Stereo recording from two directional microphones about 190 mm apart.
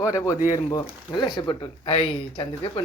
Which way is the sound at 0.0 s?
15° left (ahead or behind).